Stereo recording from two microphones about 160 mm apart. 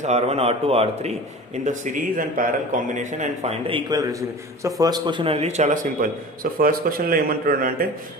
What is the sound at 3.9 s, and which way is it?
A man's voice, 25° right (ahead or behind).